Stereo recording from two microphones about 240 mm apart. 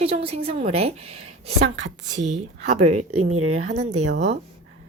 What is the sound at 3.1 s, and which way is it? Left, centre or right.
Speech, right.